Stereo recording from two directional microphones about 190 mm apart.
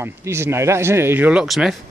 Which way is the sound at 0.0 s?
15° right (ahead or behind).